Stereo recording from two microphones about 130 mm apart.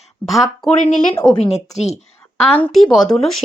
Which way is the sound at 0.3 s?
Centre (ahead or behind).